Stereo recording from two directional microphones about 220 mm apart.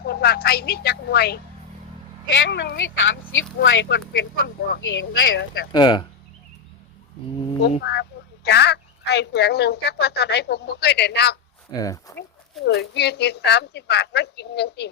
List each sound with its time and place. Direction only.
0.0 s a woman's voice: 45° left (ahead or behind)
2.4 s speech: 50° left (ahead or behind)
5.7 s speech: 20° left (ahead or behind)
7.8 s speech: 50° left (ahead or behind)
11.7 s speech: 15° left (ahead or behind)
12.6 s speech: 50° left (ahead or behind)